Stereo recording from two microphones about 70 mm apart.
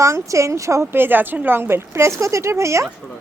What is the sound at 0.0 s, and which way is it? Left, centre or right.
Speech, right.